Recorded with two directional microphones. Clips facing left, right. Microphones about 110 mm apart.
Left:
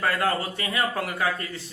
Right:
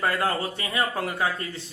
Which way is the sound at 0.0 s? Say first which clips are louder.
Even; 25° right (ahead or behind).